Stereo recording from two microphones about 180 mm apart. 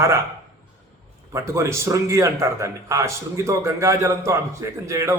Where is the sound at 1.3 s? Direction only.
15° right (ahead or behind).